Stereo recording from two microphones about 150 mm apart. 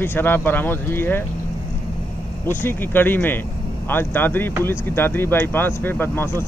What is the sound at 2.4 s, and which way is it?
Speech, 15° left (ahead or behind).